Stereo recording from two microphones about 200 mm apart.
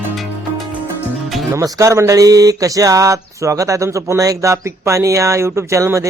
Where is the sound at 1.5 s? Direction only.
15° right (ahead or behind).